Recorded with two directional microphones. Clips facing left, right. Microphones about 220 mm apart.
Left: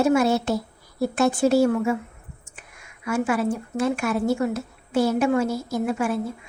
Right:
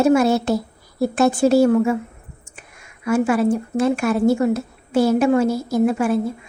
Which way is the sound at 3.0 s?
35° right (ahead or behind).